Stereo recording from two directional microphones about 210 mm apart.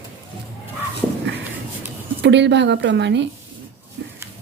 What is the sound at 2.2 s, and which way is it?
A woman's voice, 55° right (ahead or behind).